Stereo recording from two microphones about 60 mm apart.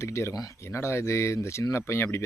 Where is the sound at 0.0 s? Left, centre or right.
Left.